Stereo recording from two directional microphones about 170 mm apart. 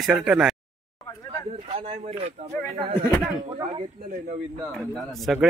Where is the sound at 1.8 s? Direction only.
40° right (ahead or behind).